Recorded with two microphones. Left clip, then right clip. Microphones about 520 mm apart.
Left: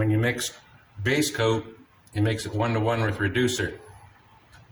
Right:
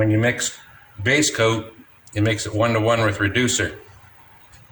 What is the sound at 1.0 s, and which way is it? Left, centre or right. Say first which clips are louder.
Speech: right 6 dB; left.